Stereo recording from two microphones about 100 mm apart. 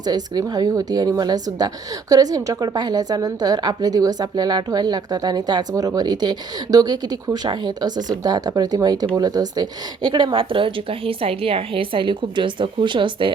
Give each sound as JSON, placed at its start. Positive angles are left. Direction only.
{"t": 0.0, "sound": "a woman's voice", "side_deg": -40}
{"t": 10.3, "sound": "a woman's voice", "side_deg": -60}